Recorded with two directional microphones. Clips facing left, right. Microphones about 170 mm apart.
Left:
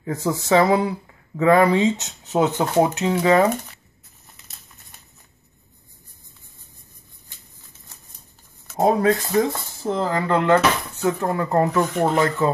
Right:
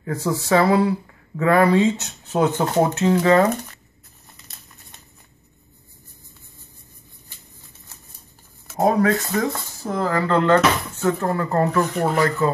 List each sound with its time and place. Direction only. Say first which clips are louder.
0.0 s speech: even; 20° left (ahead or behind)
8.7 s speech: even; 20° left (ahead or behind)
11.9 s speech: left 1 dB; centre (ahead or behind)
12.4 s speech: even; 20° left (ahead or behind)